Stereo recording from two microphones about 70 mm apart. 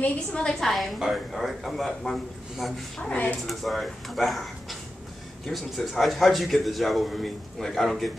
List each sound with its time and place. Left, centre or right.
0.0 s a woman's voice: centre
0.7 s speech: centre
3.0 s speech: centre
3.4 s speech: centre